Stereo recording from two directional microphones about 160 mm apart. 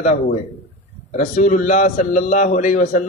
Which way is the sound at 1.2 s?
50° left (ahead or behind).